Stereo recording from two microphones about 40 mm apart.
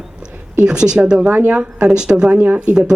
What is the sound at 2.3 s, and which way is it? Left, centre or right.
Speech, right.